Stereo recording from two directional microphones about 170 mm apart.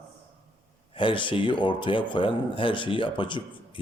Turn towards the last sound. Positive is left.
turn(degrees=30)  # may be behind; listen again after turning